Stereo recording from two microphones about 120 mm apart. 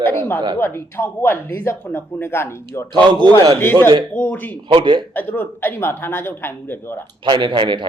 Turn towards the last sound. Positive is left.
turn(degrees=-40)  # may be behind; listen again after turning